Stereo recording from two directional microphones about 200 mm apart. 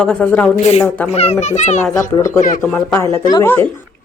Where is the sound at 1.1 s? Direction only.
30° left (ahead or behind).